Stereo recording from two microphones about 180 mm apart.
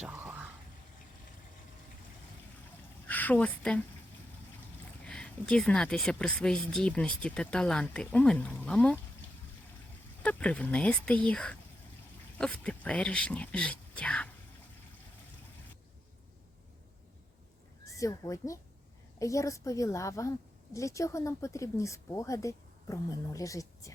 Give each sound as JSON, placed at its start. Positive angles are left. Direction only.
{"t": 0.0, "sound": "a sound", "side_deg": -10}
{"t": 3.1, "sound": "speech", "side_deg": 10}
{"t": 5.0, "sound": "speech", "side_deg": 5}
{"t": 10.2, "sound": "speech", "side_deg": 10}
{"t": 17.8, "sound": "speech", "side_deg": 15}